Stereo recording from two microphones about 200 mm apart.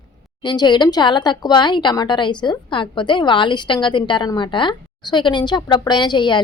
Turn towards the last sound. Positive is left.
turn(degrees=25)  # may be behind; listen again after turning